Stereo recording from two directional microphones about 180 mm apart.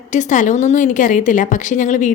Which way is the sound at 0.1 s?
45° left (ahead or behind).